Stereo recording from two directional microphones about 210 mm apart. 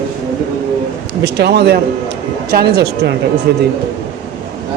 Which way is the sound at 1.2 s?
50° right (ahead or behind).